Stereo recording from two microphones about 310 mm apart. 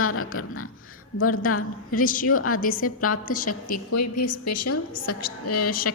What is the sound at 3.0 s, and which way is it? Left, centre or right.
Speech, left.